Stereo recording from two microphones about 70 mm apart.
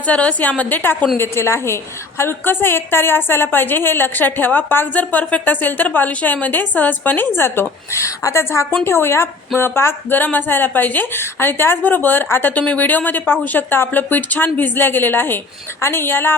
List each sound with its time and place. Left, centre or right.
0.0 s a woman's voice: centre
1.2 s a woman's voice: left